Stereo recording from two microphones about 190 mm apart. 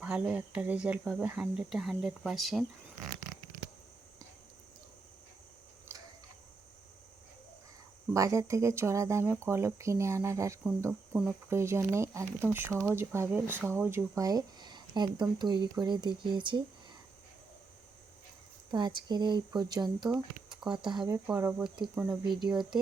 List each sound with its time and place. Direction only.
0.0 s speech: 5° right (ahead or behind)
5.9 s a sound: 10° right (ahead or behind)
8.1 s speech: 15° right (ahead or behind)
18.7 s speech: 20° right (ahead or behind)
20.1 s speech: centre (ahead or behind)
20.7 s speech: 25° right (ahead or behind)
21.1 s speech: 15° right (ahead or behind)
21.6 s speech: 5° right (ahead or behind)
22.0 s speech: 20° right (ahead or behind)